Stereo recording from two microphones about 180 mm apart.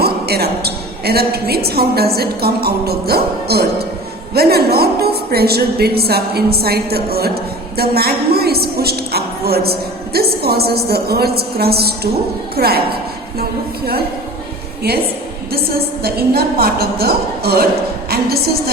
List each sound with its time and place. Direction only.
0.0 s a woman's voice: 60° right (ahead or behind)
16.0 s a woman's voice: 60° right (ahead or behind)